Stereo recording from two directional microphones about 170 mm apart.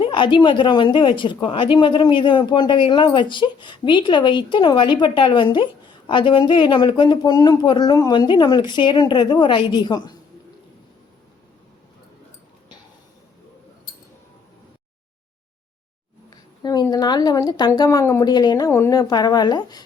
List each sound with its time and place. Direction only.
0.0 s a woman's voice: 30° left (ahead or behind)
16.3 s a sound: 25° left (ahead or behind)
16.8 s a woman's voice: 25° left (ahead or behind)